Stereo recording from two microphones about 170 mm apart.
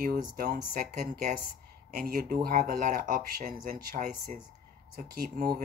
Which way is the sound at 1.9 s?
60° right (ahead or behind).